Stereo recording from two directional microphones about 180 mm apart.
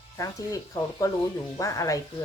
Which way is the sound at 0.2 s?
20° left (ahead or behind).